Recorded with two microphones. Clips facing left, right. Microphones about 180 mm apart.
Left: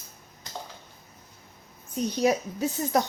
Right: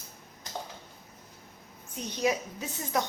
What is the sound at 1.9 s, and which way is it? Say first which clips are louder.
A woman's voice: left 5 dB; 35° left (ahead or behind).